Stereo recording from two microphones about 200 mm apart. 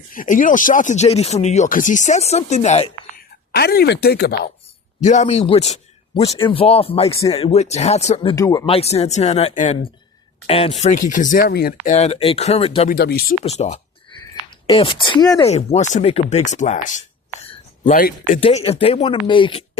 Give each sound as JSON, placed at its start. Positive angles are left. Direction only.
{"t": 0.1, "sound": "speech", "side_deg": 40}
{"t": 3.5, "sound": "speech", "side_deg": 50}
{"t": 4.9, "sound": "speech", "side_deg": 35}
{"t": 8.4, "sound": "speech", "side_deg": 20}
{"t": 11.9, "sound": "speech", "side_deg": 30}
{"t": 12.9, "sound": "speech", "side_deg": 50}
{"t": 13.4, "sound": "speech", "side_deg": 30}
{"t": 14.2, "sound": "a sound", "side_deg": 25}
{"t": 15.4, "sound": "speech", "side_deg": 35}
{"t": 18.3, "sound": "speech", "side_deg": 30}